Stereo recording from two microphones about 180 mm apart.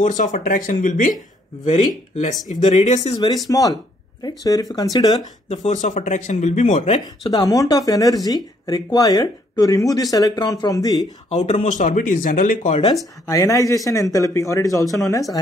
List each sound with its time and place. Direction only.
0.0 s speech: 45° left (ahead or behind)
3.4 s speech: 20° left (ahead or behind)
5.5 s speech: 40° left (ahead or behind)
7.3 s speech: 20° left (ahead or behind)
11.3 s speech: 35° left (ahead or behind)
13.3 s a man's voice: 20° left (ahead or behind)